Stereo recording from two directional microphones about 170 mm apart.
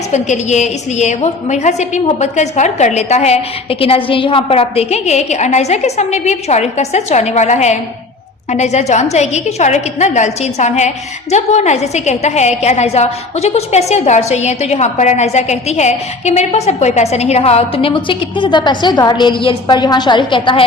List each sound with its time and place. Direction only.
0.1 s a woman's voice: 45° left (ahead or behind)